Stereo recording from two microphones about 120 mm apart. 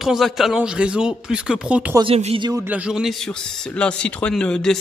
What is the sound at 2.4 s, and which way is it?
Speech, 35° right (ahead or behind).